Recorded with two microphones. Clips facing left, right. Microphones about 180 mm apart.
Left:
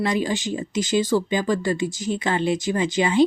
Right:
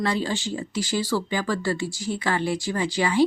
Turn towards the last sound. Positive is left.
turn(degrees=20)  # may be behind; listen again after turning